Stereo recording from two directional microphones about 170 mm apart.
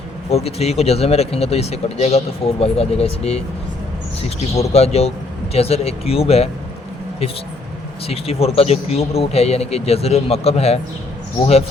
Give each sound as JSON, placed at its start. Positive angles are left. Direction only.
{"t": 0.3, "sound": "speech", "side_deg": 35}
{"t": 8.0, "sound": "speech", "side_deg": 35}